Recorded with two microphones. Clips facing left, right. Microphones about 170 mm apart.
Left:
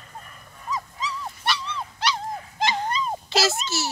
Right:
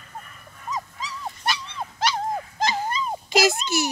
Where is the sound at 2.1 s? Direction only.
45° right (ahead or behind).